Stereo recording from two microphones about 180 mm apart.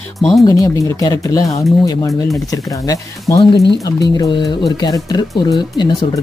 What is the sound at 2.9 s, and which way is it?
Speech, 20° left (ahead or behind).